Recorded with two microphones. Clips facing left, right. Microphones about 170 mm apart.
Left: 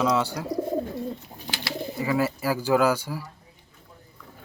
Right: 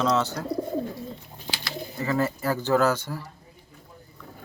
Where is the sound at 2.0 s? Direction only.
10° left (ahead or behind).